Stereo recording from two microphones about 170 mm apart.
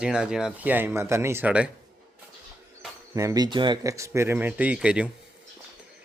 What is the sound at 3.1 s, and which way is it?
Speech, 20° right (ahead or behind).